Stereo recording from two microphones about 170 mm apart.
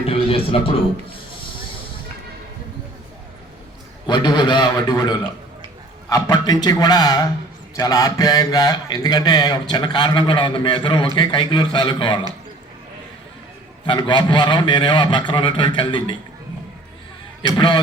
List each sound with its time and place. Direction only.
0.0 s speech: 35° left (ahead or behind)
4.0 s speech: 25° left (ahead or behind)
13.8 s speech: 30° left (ahead or behind)
17.4 s speech: 25° left (ahead or behind)